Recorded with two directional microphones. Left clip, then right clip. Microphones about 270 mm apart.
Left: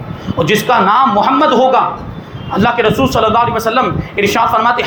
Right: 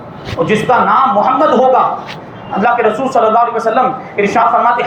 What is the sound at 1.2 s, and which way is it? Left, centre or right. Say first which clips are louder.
Speech: even; left.